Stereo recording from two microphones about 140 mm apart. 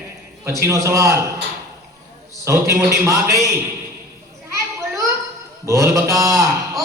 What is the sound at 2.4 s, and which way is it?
A man's voice, 20° right (ahead or behind).